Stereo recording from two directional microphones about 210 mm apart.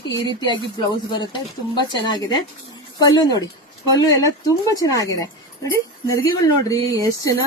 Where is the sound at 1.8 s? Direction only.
20° left (ahead or behind).